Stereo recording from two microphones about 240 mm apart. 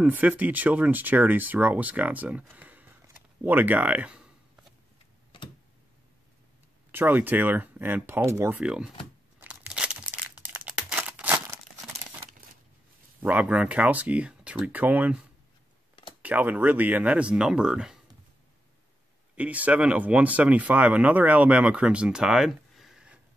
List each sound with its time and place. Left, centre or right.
0.0 s speech: centre
6.9 s speech: centre
9.4 s crumpling: centre
13.2 s speech: centre
16.2 s speech: centre
19.3 s speech: centre